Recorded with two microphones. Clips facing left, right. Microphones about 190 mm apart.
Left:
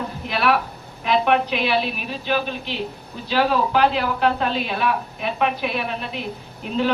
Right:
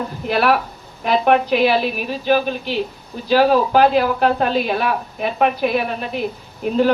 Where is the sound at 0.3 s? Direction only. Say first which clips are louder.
Right 4 dB; 45° right (ahead or behind).